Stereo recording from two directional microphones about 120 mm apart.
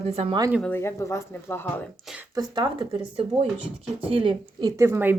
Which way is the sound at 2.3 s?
40° right (ahead or behind).